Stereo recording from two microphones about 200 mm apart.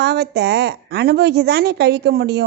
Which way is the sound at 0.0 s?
55° right (ahead or behind).